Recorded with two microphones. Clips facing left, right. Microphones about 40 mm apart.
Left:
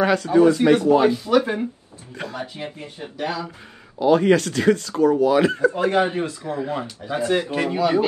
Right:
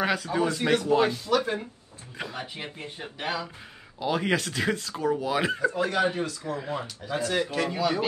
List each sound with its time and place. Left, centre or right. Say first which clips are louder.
0.0 s speech: left 10 dB; centre
1.1 s speech: left 6 dB; left
2.2 s speech: left 4 dB; centre
2.5 s speech: left 4 dB; right
4.0 s speech: left 10 dB; centre
5.7 s speech: left 6 dB; left
6.6 s speech: left 10 dB; centre
7.1 s speech: left 6 dB; left